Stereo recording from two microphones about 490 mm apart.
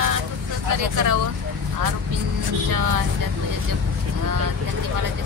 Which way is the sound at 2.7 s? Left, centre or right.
Right.